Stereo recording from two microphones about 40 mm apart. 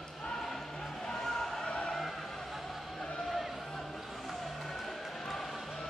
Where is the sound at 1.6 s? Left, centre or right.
Left.